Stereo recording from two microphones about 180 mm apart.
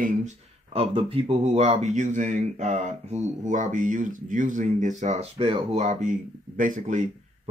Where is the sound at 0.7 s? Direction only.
30° right (ahead or behind).